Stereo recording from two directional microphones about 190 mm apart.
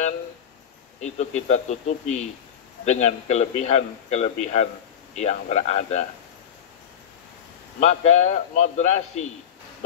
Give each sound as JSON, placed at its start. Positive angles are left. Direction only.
{"t": 1.0, "sound": "a man's voice", "side_deg": 40}
{"t": 7.8, "sound": "a man's voice", "side_deg": 35}